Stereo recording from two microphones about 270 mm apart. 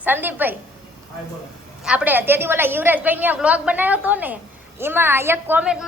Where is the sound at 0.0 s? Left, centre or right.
Centre.